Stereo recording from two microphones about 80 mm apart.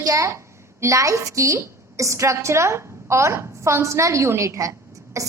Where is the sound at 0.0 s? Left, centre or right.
Right.